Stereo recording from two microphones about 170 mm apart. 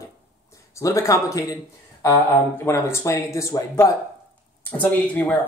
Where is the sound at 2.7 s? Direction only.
15° left (ahead or behind).